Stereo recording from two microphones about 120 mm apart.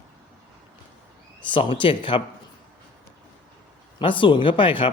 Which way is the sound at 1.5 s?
45° left (ahead or behind).